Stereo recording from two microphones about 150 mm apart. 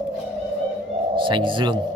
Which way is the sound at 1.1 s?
35° right (ahead or behind).